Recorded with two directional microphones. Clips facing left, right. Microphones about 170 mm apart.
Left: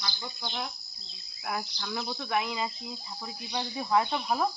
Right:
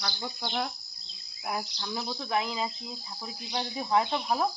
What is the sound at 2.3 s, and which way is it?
Speech, 30° right (ahead or behind).